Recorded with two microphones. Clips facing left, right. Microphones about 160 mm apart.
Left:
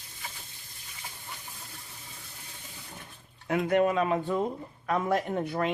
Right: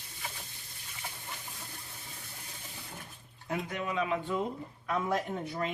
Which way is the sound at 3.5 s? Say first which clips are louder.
Left 10 dB; 65° left (ahead or behind).